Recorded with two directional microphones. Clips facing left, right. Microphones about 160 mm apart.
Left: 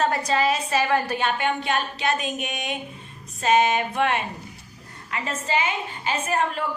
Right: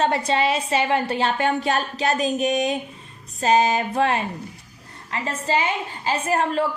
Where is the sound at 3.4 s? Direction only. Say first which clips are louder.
Right 1 dB; 35° right (ahead or behind).